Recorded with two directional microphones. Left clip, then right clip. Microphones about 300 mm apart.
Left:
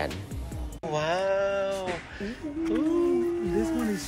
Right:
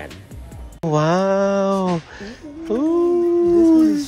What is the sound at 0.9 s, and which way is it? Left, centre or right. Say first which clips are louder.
Mantra: right 9 dB; right.